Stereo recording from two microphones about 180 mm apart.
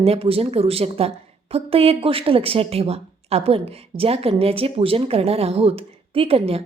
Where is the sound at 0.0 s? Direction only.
35° right (ahead or behind).